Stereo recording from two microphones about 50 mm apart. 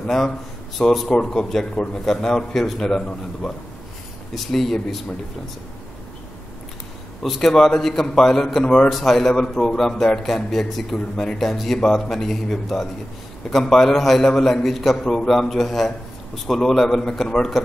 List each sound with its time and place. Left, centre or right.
0.7 s a man's voice: centre
7.2 s a man's voice: centre